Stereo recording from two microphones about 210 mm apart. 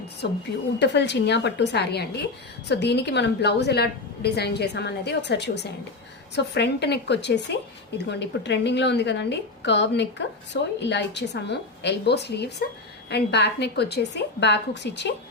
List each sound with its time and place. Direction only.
0.2 s a woman's voice: 55° left (ahead or behind)